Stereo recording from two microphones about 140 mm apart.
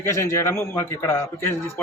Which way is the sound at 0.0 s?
20° left (ahead or behind).